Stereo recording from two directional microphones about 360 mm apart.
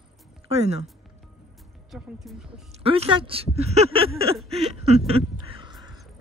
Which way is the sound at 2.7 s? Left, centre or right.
Centre.